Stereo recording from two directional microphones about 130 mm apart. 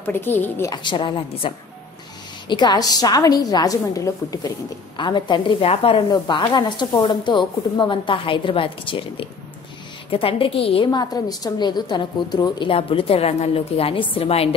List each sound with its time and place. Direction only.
0.0 s a woman's voice: 15° left (ahead or behind)
0.7 s a woman's voice: 35° left (ahead or behind)
5.7 s a woman's voice: 50° left (ahead or behind)
6.0 s a woman's voice: 35° left (ahead or behind)
10.9 s a woman's voice: 30° left (ahead or behind); by 14.5 s 50° left (ahead or behind)